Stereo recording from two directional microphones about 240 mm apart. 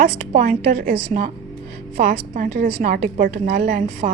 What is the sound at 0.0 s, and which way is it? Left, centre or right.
A woman's voice, right.